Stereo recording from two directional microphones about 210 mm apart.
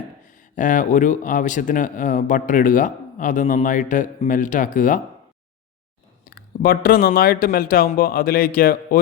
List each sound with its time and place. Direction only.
0.5 s speech: 40° left (ahead or behind)
6.3 s speech: 45° left (ahead or behind)